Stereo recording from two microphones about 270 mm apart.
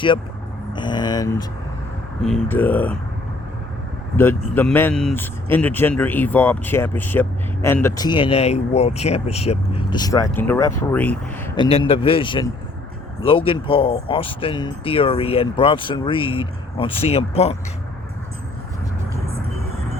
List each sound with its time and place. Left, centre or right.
0.7 s speech: centre
4.5 s speech: centre
11.5 s speech: centre